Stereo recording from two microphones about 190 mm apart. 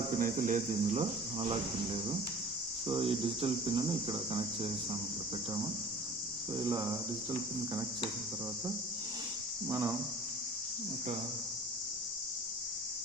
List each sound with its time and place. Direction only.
0.2 s speech: 45° right (ahead or behind)
2.8 s cricket: 30° right (ahead or behind)
9.6 s cricket: 15° right (ahead or behind)